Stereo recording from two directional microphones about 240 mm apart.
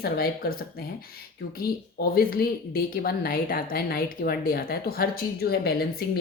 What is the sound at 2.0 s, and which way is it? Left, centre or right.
A woman's voice, left.